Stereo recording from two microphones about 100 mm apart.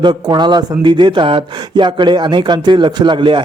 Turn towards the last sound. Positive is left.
turn(degrees=-55)  # may be behind; listen again after turning